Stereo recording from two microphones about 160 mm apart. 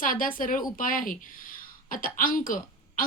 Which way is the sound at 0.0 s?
60° left (ahead or behind).